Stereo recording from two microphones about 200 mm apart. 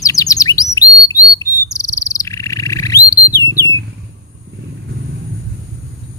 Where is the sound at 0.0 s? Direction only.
15° left (ahead or behind).